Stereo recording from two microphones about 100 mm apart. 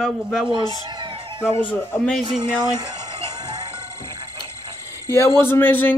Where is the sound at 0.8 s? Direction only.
45° right (ahead or behind).